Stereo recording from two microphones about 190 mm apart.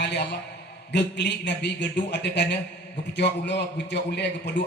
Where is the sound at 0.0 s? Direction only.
65° left (ahead or behind).